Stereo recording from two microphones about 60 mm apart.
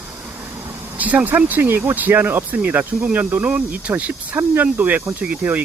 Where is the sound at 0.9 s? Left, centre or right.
Right.